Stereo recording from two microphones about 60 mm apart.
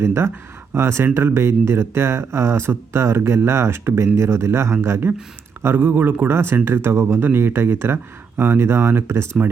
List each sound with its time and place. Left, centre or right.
0.0 s speech: right